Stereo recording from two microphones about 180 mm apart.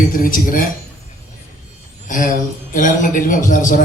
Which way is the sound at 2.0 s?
45° left (ahead or behind).